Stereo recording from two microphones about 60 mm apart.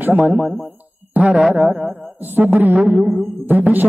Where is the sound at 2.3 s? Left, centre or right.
Right.